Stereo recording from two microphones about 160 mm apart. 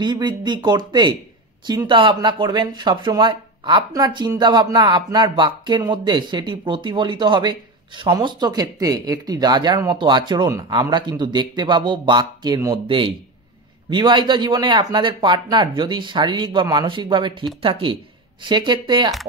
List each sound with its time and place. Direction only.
0.0 s speech: 25° right (ahead or behind)